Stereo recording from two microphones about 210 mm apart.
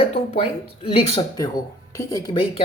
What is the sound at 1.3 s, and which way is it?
Speech, 20° left (ahead or behind).